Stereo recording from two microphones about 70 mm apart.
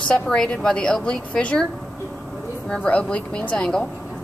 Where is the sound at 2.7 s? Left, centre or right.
Centre.